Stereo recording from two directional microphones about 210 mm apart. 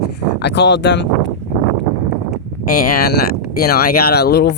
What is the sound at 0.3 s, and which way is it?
Speech, 55° left (ahead or behind).